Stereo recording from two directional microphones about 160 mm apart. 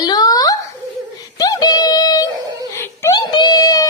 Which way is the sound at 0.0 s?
25° left (ahead or behind).